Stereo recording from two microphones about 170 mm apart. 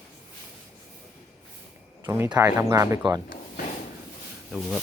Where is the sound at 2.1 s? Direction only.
15° right (ahead or behind).